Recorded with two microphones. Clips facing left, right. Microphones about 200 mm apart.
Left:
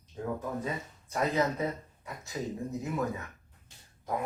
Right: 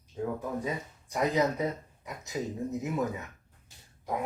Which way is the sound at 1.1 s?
15° right (ahead or behind).